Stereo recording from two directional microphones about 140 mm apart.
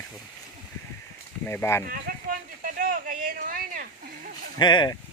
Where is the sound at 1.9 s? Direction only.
85° right.